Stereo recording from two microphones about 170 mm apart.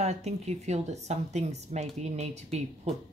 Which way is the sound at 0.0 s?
40° right (ahead or behind).